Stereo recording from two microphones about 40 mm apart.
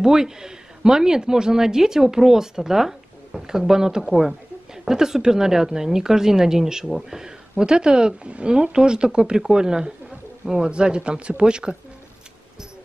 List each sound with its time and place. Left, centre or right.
0.0 s speech: centre